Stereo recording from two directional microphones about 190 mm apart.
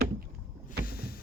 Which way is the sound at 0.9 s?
50° left (ahead or behind).